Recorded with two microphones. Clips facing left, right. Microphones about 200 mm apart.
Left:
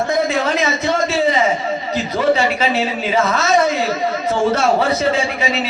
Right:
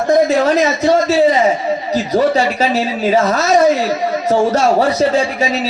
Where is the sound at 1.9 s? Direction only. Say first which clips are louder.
Right 3 dB; 40° right (ahead or behind).